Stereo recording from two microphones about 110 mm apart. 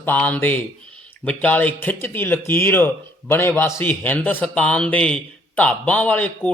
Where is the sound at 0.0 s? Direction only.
15° left (ahead or behind).